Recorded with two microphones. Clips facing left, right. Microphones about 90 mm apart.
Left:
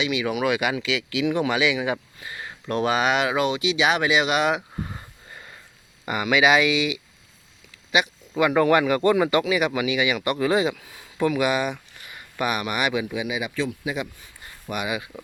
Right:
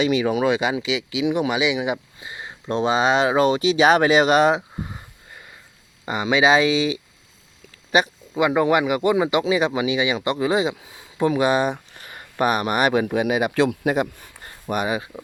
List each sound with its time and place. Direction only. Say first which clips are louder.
0.0 s speech: right 5 dB; 35° right (ahead or behind)
4.8 s a sound: even; 5° right (ahead or behind)
6.1 s speech: right 2 dB; 25° right (ahead or behind)
8.4 s speech: even; 20° right (ahead or behind)